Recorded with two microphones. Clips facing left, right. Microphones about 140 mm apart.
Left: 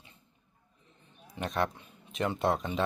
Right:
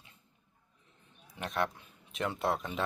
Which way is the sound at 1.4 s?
Centre (ahead or behind).